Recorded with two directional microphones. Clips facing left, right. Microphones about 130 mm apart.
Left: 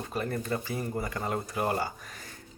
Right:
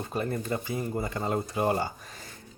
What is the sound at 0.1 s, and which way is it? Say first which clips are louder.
Speech: right 1 dB; 25° right (ahead or behind).